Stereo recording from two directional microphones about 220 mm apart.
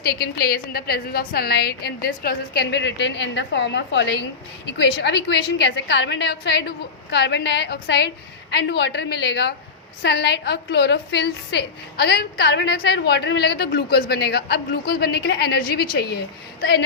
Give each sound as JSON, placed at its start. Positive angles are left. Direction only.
{"t": 0.1, "sound": "a woman's voice", "side_deg": 45}